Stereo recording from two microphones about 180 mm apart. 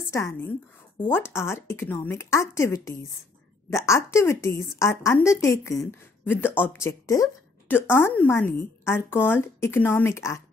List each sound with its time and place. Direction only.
0.1 s a woman's voice: 15° left (ahead or behind)